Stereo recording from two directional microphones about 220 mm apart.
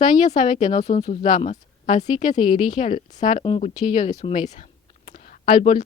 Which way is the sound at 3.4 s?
20° left (ahead or behind).